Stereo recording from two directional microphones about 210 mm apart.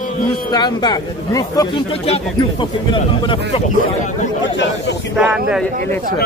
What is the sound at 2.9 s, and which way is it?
Speech, 25° left (ahead or behind).